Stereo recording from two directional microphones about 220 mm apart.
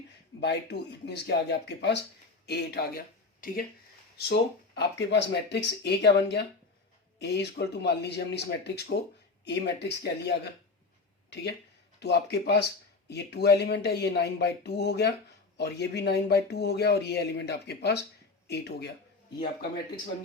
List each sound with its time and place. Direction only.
0.3 s speech: 50° left (ahead or behind)
11.9 s speech: 50° left (ahead or behind)